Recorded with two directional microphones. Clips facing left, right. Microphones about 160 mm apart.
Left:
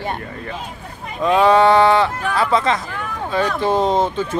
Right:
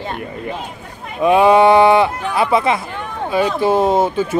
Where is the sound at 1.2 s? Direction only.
15° right (ahead or behind).